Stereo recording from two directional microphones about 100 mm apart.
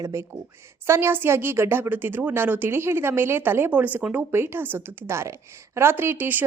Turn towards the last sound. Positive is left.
turn(degrees=-20)  # may be behind; listen again after turning